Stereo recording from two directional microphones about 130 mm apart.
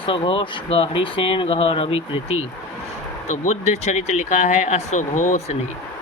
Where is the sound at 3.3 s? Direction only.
60° left (ahead or behind).